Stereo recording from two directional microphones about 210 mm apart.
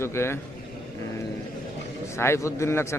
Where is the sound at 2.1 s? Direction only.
10° left (ahead or behind).